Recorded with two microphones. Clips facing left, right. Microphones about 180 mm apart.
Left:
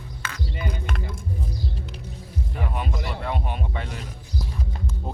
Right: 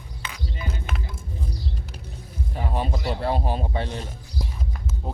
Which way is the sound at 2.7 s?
35° right (ahead or behind).